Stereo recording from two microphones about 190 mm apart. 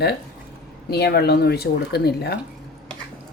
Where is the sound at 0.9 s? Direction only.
60° left (ahead or behind).